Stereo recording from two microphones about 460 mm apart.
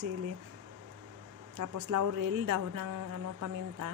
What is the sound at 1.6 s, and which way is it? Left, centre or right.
A woman's voice, right.